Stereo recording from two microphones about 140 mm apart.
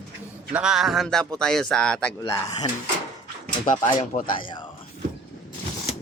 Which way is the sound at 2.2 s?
20° left (ahead or behind).